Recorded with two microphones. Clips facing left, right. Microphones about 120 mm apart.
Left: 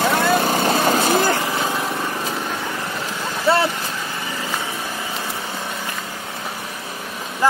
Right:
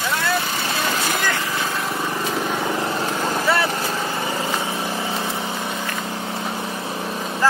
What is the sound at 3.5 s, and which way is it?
Vehicle, 25° left (ahead or behind).